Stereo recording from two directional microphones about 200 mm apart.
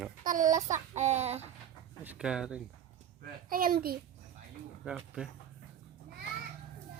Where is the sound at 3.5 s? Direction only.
45° right (ahead or behind).